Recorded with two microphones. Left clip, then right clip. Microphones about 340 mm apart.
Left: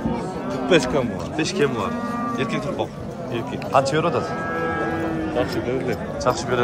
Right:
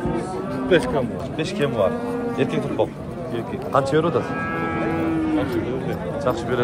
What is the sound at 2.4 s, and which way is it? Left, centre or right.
A man's voice, centre.